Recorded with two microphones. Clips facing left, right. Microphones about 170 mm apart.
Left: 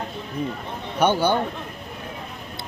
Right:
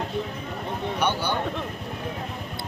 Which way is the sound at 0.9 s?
45° left (ahead or behind).